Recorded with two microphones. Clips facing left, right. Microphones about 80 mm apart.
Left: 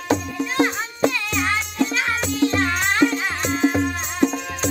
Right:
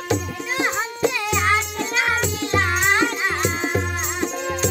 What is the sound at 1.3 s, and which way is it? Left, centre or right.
Music, centre.